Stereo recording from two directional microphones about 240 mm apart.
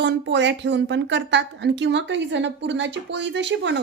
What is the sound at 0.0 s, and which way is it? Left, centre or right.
A woman's voice, right.